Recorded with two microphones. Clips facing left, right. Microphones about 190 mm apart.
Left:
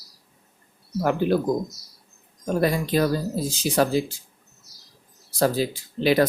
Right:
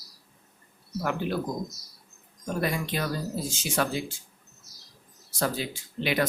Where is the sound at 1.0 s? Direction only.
40° left (ahead or behind).